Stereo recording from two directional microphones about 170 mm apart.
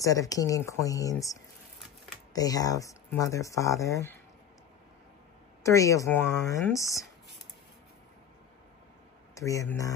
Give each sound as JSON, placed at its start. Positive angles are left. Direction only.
{"t": 0.0, "sound": "speech", "side_deg": 20}
{"t": 5.6, "sound": "speech", "side_deg": 20}
{"t": 9.3, "sound": "speech", "side_deg": 20}